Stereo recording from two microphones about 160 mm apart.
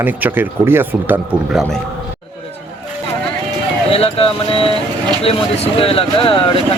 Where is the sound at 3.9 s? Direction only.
35° left (ahead or behind).